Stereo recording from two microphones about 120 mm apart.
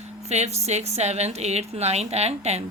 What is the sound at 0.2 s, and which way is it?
A woman's voice, 65° right (ahead or behind).